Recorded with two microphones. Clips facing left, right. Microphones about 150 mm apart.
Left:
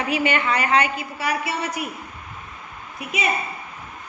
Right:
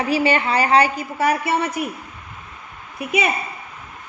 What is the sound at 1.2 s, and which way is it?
Speech, 50° right (ahead or behind).